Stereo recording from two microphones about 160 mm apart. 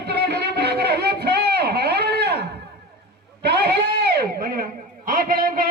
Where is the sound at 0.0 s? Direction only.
90° right.